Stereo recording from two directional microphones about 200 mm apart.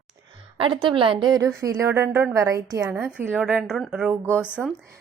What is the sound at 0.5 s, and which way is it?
A woman's voice, 25° right (ahead or behind).